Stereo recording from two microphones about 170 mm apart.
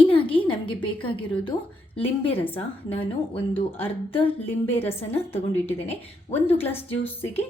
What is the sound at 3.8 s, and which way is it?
Speech, 30° left (ahead or behind).